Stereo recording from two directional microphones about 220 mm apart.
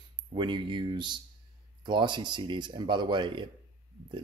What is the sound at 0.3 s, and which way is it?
Speech, 20° right (ahead or behind).